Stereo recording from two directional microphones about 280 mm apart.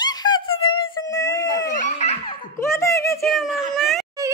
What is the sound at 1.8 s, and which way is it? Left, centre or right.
Belly laugh, left.